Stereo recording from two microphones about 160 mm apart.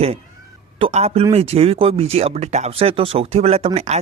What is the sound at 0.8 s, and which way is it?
Speech, 40° right (ahead or behind).